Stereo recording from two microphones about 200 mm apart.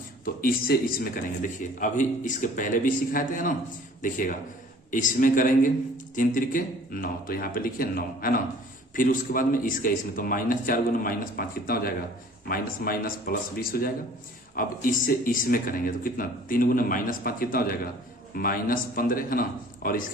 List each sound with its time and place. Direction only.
0.4 s a man's voice: 45° left (ahead or behind)